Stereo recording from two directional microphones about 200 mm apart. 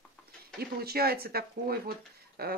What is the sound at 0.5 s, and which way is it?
Speech, 50° right (ahead or behind).